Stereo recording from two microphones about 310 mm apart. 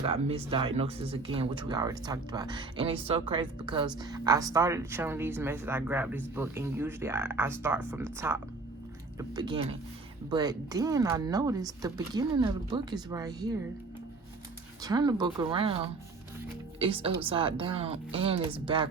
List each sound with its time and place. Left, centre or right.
0.0 s speech: centre
14.8 s speech: centre